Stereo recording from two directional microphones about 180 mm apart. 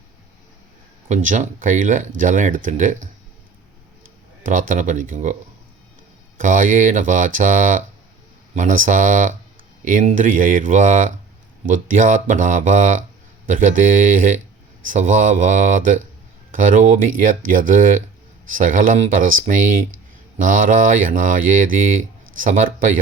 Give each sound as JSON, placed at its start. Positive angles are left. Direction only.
{"t": 1.0, "sound": "speech", "side_deg": -45}
{"t": 4.4, "sound": "speech", "side_deg": -45}